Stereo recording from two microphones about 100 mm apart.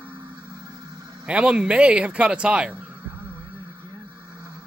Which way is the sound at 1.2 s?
10° right (ahead or behind).